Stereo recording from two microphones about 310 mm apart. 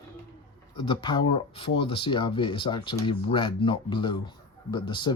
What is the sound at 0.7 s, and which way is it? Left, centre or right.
Speech, centre.